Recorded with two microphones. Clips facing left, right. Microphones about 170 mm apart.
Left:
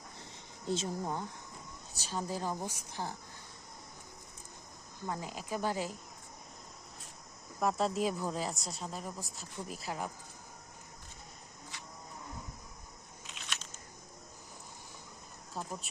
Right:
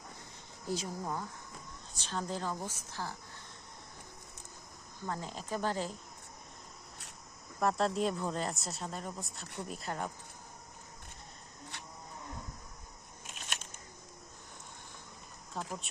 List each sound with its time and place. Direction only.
0.6 s speech: 25° left (ahead or behind)
1.9 s a woman's voice: 10° left (ahead or behind)
4.9 s a woman's voice: 15° left (ahead or behind)
7.6 s a woman's voice: centre (ahead or behind)
11.7 s livestock: 65° right (ahead or behind)
13.2 s a sound: 50° right (ahead or behind)
15.5 s a sound: centre (ahead or behind)